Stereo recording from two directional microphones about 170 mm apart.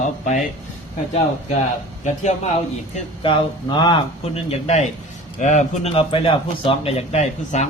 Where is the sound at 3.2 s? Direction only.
30° left (ahead or behind).